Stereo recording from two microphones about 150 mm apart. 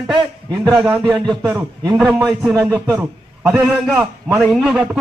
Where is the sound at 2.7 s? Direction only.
10° right (ahead or behind).